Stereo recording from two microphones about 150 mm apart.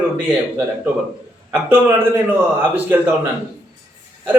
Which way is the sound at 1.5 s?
10° right (ahead or behind).